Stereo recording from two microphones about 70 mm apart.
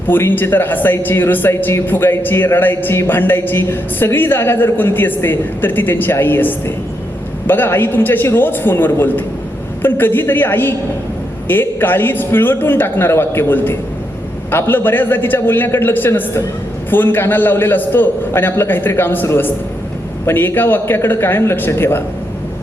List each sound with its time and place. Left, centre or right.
0.1 s speech: left